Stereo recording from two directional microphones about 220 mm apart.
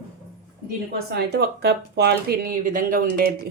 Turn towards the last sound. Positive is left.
turn(degrees=-40)  # may be behind; listen again after turning